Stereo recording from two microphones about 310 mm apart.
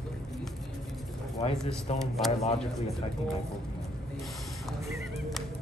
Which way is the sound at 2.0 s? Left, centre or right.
Centre.